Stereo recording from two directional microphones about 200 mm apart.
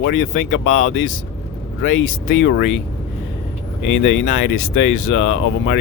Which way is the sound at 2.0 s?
65° left (ahead or behind).